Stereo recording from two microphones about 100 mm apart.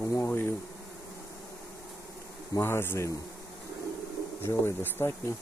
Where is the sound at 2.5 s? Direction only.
25° left (ahead or behind).